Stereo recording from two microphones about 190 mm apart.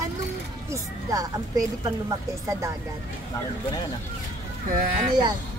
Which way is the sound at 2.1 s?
15° right (ahead or behind).